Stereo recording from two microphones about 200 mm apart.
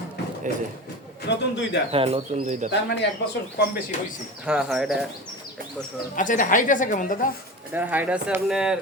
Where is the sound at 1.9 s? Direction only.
25° right (ahead or behind).